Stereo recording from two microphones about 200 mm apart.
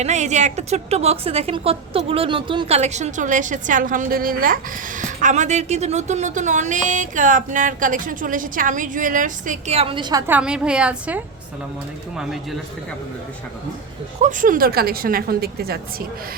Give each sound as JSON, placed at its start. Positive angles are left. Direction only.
{"t": 0.0, "sound": "a woman's voice", "side_deg": -35}
{"t": 14.2, "sound": "a woman's voice", "side_deg": -40}